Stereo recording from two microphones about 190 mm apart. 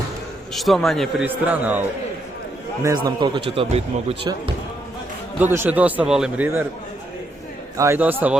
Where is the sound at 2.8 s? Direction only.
20° right (ahead or behind).